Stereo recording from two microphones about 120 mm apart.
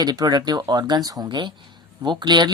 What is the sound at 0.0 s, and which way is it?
A woman's voice, 35° right (ahead or behind).